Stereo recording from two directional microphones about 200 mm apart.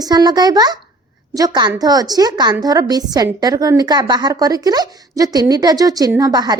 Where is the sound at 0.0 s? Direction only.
20° right (ahead or behind).